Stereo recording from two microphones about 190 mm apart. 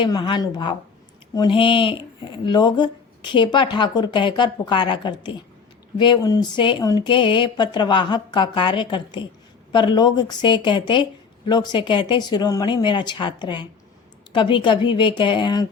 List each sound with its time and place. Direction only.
0.0 s speech: 25° left (ahead or behind)